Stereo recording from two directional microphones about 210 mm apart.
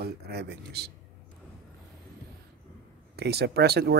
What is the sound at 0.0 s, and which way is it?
Speech, 50° right (ahead or behind).